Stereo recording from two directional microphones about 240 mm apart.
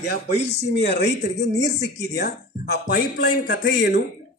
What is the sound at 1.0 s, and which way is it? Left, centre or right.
Speech, left.